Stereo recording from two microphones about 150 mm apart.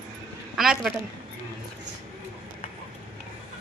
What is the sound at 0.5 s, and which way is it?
Speech, centre (ahead or behind).